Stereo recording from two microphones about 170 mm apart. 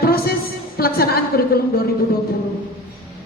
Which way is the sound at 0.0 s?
65° left (ahead or behind).